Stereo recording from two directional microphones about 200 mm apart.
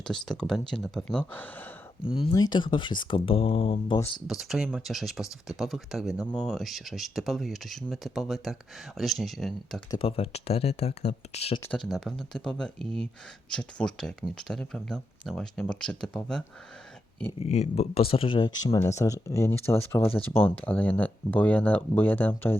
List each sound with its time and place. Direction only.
0.0 s speech: 5° left (ahead or behind)
2.0 s speech: 25° left (ahead or behind)
4.3 s speech: centre (ahead or behind)
9.9 s speech: 30° left (ahead or behind)
11.6 s speech: 5° left (ahead or behind)
17.4 s speech: 35° left (ahead or behind); by 22.5 s 10° left (ahead or behind)